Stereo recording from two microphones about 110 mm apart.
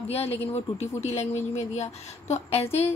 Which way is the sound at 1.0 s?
90° left.